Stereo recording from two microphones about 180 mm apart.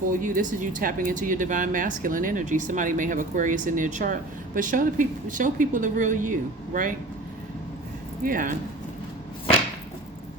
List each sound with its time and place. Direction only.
0.1 s speech: 45° right (ahead or behind)
8.2 s speech: 50° right (ahead or behind)